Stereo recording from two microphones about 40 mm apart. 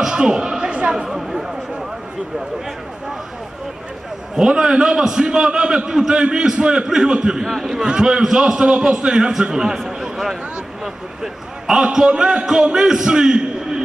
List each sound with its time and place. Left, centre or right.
0.0 s a sound: centre
0.9 s a man's voice: centre
4.4 s a man's voice: centre
11.8 s a man's voice: centre